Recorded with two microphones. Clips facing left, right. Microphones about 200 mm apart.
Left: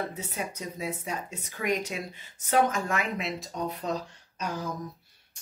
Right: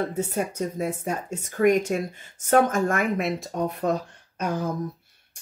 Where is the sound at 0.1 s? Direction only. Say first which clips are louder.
Right 9 dB; 50° right (ahead or behind).